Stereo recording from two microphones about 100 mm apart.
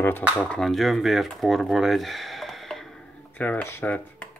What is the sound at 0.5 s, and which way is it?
Speech, 5° left (ahead or behind).